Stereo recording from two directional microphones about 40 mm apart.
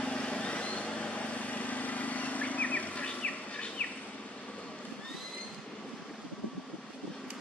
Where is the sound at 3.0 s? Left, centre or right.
Left.